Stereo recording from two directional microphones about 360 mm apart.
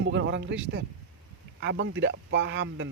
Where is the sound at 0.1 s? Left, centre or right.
Right.